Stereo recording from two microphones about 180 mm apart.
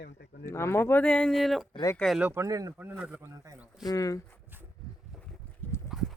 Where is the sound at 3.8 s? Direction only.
20° left (ahead or behind).